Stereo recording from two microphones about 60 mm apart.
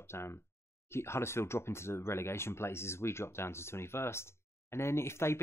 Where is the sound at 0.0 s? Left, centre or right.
Left.